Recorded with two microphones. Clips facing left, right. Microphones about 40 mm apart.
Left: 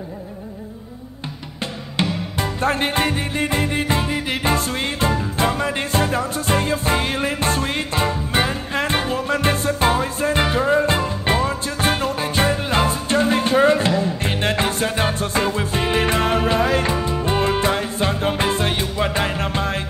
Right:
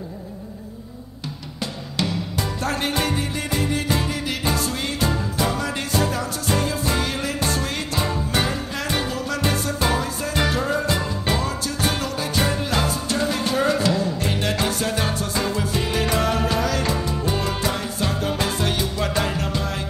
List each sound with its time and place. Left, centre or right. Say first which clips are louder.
1.6 s music: left 3 dB; left